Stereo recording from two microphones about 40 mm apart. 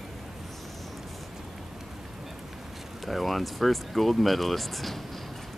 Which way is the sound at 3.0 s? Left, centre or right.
Centre.